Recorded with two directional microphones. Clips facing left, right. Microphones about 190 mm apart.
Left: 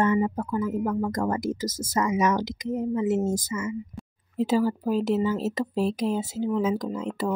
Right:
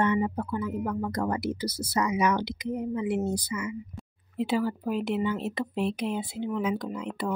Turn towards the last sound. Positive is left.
turn(degrees=40)  # may be behind; listen again after turning